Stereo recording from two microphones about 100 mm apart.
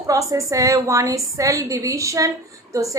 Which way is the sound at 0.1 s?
35° right (ahead or behind).